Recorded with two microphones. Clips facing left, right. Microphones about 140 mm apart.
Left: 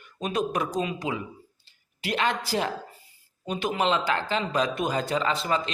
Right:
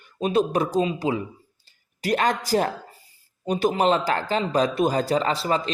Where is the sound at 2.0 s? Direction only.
45° right (ahead or behind).